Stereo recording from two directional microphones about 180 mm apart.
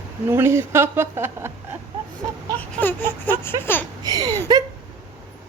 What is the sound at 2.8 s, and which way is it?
Speech, 10° left (ahead or behind).